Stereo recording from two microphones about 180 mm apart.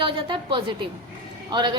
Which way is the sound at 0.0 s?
30° right (ahead or behind).